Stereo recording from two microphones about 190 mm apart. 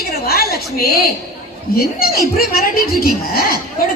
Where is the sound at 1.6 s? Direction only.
50° left (ahead or behind).